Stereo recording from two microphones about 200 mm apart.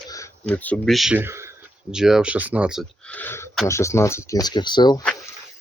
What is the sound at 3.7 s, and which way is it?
Speech, 15° left (ahead or behind).